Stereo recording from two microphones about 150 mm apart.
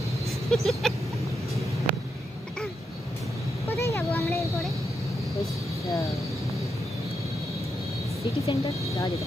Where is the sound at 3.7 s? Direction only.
15° left (ahead or behind).